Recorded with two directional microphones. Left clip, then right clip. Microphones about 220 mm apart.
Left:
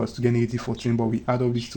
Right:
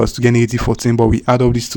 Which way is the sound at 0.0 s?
40° right (ahead or behind).